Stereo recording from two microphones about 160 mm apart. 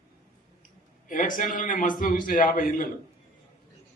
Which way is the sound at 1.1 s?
55° left (ahead or behind).